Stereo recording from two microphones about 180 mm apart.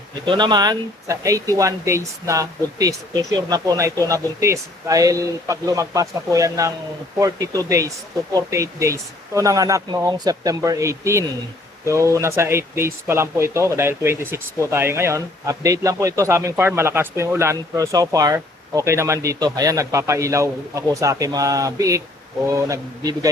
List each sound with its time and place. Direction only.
0.3 s speech: 25° right (ahead or behind)